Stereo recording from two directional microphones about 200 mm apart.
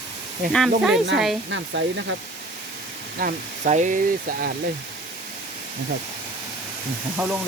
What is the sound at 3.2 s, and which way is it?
Speech, 45° right (ahead or behind).